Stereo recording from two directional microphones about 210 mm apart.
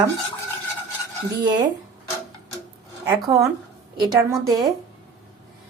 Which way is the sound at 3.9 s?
20° right (ahead or behind).